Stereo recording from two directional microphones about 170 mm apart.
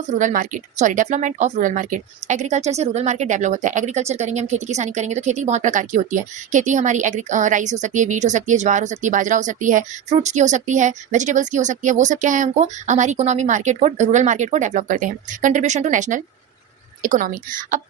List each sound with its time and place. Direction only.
0.2 s speech: 50° right (ahead or behind)